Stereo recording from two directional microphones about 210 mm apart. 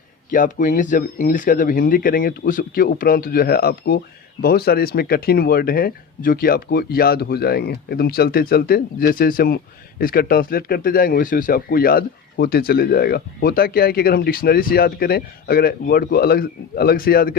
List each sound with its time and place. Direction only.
0.3 s speech: 40° left (ahead or behind)